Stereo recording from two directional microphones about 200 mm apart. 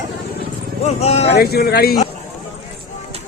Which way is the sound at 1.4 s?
50° left (ahead or behind).